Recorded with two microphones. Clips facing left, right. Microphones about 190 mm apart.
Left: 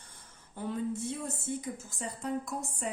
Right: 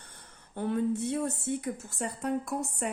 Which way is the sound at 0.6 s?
65° right (ahead or behind).